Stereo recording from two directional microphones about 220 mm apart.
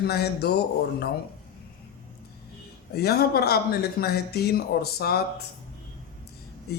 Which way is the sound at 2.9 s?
45° left (ahead or behind).